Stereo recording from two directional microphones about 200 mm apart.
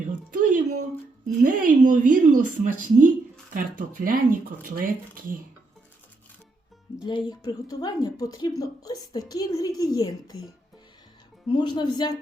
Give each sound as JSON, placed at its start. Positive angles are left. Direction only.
{"t": 0.1, "sound": "a sound", "side_deg": -40}
{"t": 1.4, "sound": "a woman's voice", "side_deg": -40}
{"t": 7.0, "sound": "a woman's voice", "side_deg": 20}
{"t": 11.4, "sound": "a woman's voice", "side_deg": 20}